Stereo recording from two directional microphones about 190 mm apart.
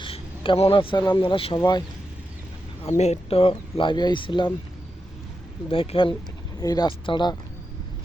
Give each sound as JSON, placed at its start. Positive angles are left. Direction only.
{"t": 0.0, "sound": "speech", "side_deg": 30}
{"t": 3.0, "sound": "speech", "side_deg": 35}
{"t": 5.6, "sound": "speech", "side_deg": 30}